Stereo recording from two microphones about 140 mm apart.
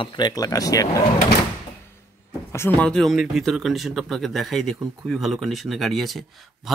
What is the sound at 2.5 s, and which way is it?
Speech, 15° left (ahead or behind).